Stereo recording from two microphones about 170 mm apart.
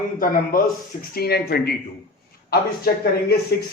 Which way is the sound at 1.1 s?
65° left (ahead or behind).